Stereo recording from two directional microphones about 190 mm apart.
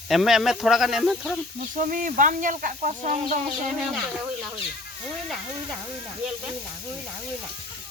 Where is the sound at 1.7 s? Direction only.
45° right (ahead or behind).